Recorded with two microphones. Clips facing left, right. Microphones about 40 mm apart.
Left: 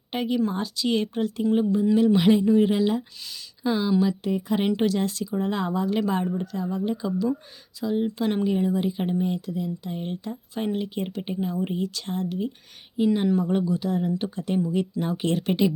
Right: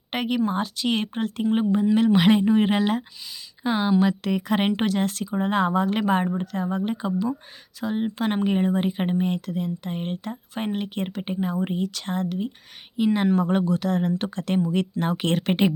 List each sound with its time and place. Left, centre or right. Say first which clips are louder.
0.1 s speech: right 1 dB; right
0.3 s speech: right 2 dB; right
3.6 s speech: right 1 dB; right
4.0 s speech: right 2 dB; right
4.7 s speech: even; right
8.4 s speech: right 1 dB; right
13.2 s speech: right 2 dB; right
14.2 s speech: right 1 dB; right
14.7 s speech: right 2 dB; right